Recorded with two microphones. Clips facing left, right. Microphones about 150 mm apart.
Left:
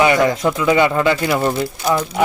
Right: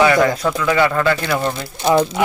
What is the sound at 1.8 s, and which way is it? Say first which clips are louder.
Speech: right 6 dB; 25° right (ahead or behind).